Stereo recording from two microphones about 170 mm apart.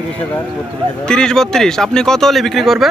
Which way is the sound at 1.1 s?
5° left (ahead or behind).